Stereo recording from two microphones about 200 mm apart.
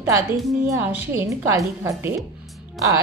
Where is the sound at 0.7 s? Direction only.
10° right (ahead or behind).